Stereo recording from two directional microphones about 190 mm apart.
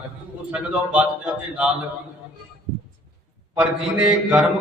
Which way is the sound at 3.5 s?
5° right (ahead or behind).